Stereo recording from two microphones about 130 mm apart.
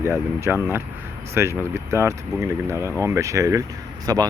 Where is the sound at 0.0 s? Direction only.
20° right (ahead or behind).